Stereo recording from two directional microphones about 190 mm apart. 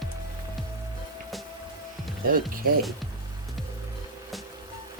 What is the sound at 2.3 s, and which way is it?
Speech, 50° right (ahead or behind).